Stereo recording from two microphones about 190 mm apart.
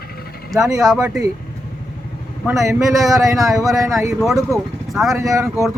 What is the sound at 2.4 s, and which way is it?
Speech, centre (ahead or behind).